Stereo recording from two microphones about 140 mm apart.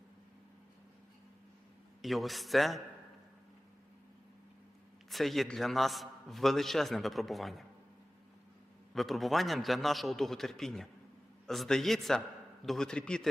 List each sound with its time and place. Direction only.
2.0 s a man's voice: centre (ahead or behind)
5.1 s a man's voice: centre (ahead or behind)
8.9 s a man's voice: centre (ahead or behind)